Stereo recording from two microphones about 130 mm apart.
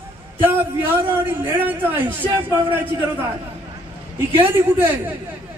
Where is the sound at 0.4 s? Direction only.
15° right (ahead or behind).